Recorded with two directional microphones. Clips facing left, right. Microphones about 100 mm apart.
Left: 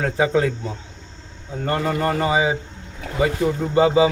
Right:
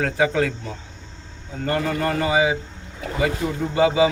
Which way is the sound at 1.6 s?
35° left (ahead or behind).